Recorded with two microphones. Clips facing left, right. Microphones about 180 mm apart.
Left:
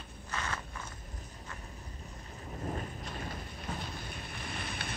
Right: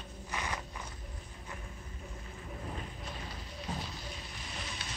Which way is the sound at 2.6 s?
45° left (ahead or behind).